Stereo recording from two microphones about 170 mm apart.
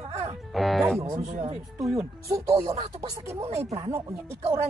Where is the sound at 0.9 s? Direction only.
20° right (ahead or behind).